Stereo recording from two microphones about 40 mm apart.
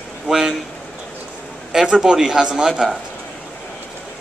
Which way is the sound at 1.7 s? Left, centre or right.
Centre.